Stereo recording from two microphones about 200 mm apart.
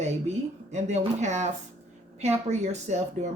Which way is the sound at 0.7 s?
35° right (ahead or behind).